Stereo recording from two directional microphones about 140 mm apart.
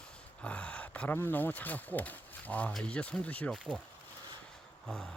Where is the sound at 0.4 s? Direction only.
10° left (ahead or behind).